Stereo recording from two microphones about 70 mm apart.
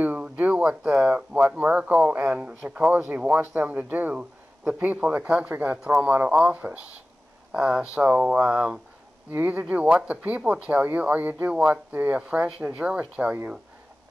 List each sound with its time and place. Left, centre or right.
0.0 s speech: right
9.3 s speech: right